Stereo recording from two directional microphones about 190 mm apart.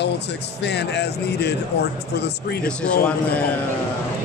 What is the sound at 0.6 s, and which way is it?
Speech, 60° left (ahead or behind).